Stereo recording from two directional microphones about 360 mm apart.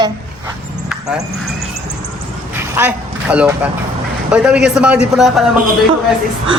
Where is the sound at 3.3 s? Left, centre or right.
Centre.